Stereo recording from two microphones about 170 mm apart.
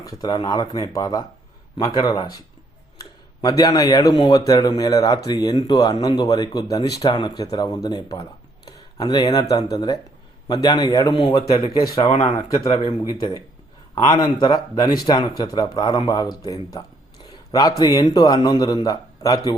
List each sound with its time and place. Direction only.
0.0 s a man's voice: 20° left (ahead or behind)
3.4 s a man's voice: 20° left (ahead or behind)
11.9 s a man's voice: 35° left (ahead or behind)